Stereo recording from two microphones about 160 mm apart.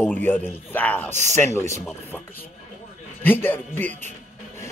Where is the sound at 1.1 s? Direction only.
45° right (ahead or behind).